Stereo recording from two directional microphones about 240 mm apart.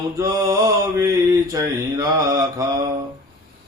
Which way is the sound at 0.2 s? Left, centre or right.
Centre.